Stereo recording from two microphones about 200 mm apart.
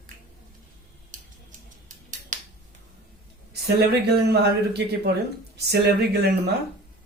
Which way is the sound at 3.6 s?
55° right (ahead or behind).